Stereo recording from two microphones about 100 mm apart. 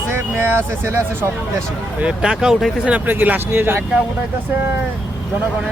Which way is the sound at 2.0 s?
10° right (ahead or behind).